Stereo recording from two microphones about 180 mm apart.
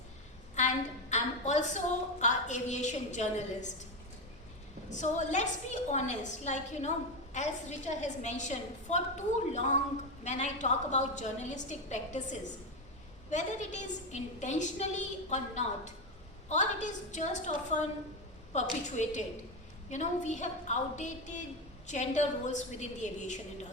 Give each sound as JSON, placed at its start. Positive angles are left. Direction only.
{"t": 0.6, "sound": "a sound", "side_deg": 40}
{"t": 1.1, "sound": "a woman's voice", "side_deg": 40}
{"t": 4.9, "sound": "a woman's voice", "side_deg": 40}